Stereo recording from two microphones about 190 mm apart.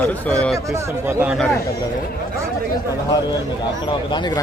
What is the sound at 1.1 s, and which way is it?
Speech, 15° right (ahead or behind).